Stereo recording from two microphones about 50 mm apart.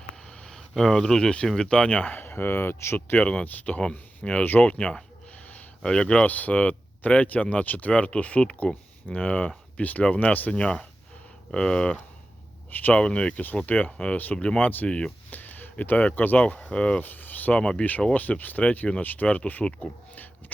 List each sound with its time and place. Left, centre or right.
0.2 s a sound: centre
0.7 s speech: centre; by 2.1 s left
2.1 s speech: left
3.2 s speech: left
6.2 s speech: left
10.5 s speech: centre
12.9 s speech: left
14.3 s speech: centre
14.6 s speech: left
14.8 s speech: centre
15.3 s a sound: left
15.7 s speech: left
16.6 s speech: left
17.0 s speech: left